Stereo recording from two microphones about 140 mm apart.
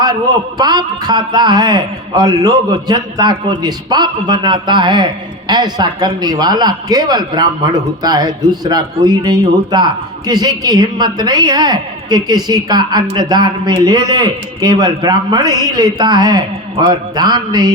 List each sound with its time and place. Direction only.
0.6 s a man's voice: 30° right (ahead or behind)